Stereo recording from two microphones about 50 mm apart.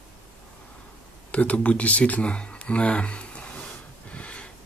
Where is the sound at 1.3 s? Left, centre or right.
Left.